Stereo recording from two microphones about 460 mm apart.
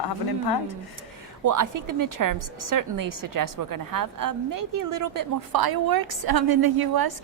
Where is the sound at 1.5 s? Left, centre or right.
Right.